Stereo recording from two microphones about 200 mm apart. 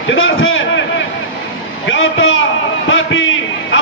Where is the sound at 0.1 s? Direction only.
75° left (ahead or behind).